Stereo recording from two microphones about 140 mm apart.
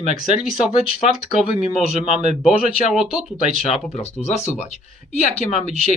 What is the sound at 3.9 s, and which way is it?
Speech, 50° left (ahead or behind).